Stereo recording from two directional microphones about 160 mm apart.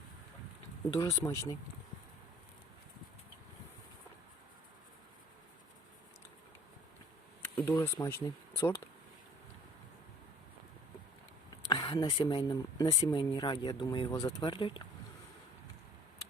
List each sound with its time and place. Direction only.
0.9 s speech: 20° left (ahead or behind)
7.4 s insect: 15° left (ahead or behind)
7.8 s speech: 15° left (ahead or behind)
11.7 s speech: 25° left (ahead or behind)